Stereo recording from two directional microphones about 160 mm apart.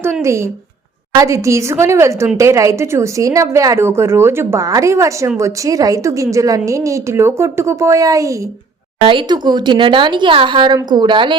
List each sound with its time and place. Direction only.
0.0 s a woman's voice: 20° right (ahead or behind)